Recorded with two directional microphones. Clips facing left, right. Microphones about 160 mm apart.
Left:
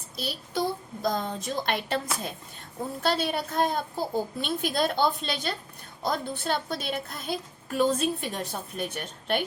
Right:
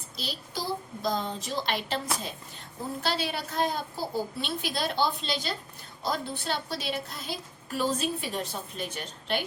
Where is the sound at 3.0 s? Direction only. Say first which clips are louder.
Left 5 dB; 50° left (ahead or behind).